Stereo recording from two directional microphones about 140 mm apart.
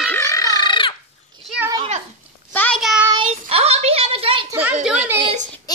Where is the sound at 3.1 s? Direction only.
45° right (ahead or behind).